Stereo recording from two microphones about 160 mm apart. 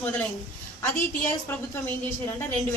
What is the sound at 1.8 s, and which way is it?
Speech, 15° left (ahead or behind).